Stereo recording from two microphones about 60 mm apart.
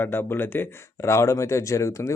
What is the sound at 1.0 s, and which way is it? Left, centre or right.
Speech, left.